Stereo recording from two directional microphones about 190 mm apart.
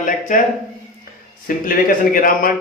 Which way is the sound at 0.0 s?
45° left (ahead or behind).